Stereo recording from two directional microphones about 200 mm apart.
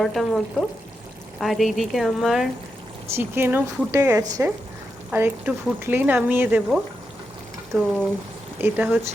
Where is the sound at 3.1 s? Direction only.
10° right (ahead or behind).